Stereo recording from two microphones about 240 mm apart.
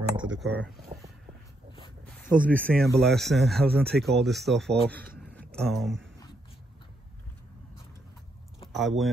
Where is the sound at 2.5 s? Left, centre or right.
Centre.